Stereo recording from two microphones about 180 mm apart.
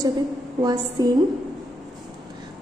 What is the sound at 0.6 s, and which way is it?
Speech, 20° right (ahead or behind).